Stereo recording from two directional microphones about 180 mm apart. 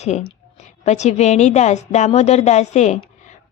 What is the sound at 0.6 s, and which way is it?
A woman's voice, 40° left (ahead or behind).